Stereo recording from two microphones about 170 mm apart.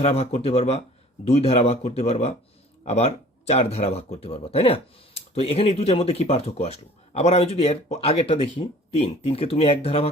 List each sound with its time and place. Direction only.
0.0 s speech: 35° left (ahead or behind)